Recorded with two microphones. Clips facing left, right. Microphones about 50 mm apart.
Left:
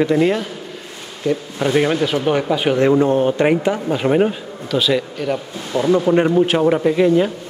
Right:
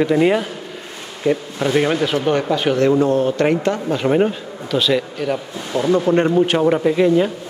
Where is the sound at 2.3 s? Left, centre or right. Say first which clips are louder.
Even; centre.